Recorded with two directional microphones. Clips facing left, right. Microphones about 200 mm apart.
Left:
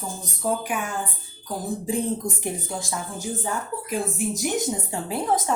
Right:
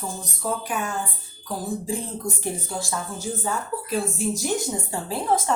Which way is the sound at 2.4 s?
15° left (ahead or behind).